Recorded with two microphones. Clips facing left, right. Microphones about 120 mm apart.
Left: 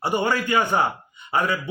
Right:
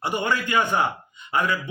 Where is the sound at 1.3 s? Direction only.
40° left (ahead or behind).